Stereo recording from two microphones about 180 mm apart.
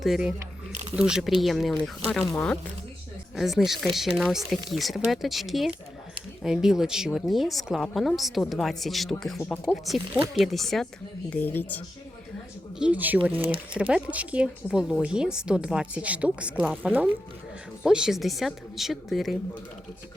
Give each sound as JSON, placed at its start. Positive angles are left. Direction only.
{"t": 0.0, "sound": "a woman's voice", "side_deg": 0}
{"t": 0.7, "sound": "camera", "side_deg": -35}
{"t": 0.9, "sound": "a woman's voice", "side_deg": -5}
{"t": 12.8, "sound": "a woman's voice", "side_deg": -10}